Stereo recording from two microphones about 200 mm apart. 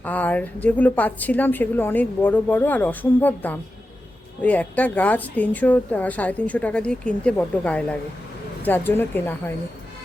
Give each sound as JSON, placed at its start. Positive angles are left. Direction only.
{"t": 0.0, "sound": "speech", "side_deg": 10}